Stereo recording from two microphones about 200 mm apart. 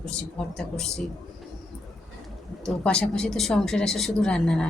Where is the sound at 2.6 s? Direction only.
5° left (ahead or behind).